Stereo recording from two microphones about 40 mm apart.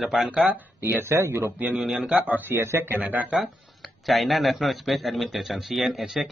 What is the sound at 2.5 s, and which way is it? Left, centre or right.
Speech, right.